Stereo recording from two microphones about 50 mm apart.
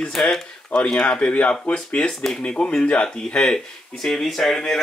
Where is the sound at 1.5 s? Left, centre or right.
Centre.